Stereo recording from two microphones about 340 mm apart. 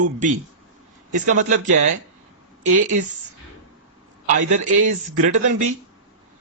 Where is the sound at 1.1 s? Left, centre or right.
Right.